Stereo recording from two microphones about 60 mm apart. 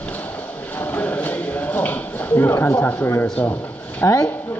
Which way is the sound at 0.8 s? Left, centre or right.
Left.